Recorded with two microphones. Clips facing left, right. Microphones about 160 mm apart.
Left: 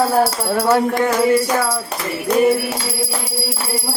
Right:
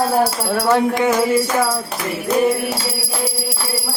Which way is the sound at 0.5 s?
5° left (ahead or behind).